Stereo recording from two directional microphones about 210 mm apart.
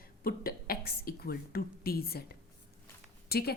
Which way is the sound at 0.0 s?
45° left (ahead or behind).